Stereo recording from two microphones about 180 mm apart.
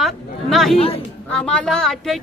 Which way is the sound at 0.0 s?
Centre (ahead or behind).